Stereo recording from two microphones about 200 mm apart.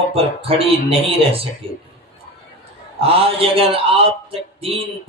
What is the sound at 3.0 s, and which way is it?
Speech, 30° right (ahead or behind).